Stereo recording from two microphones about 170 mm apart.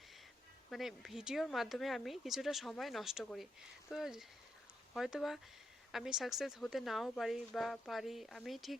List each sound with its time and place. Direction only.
0.7 s speech: centre (ahead or behind)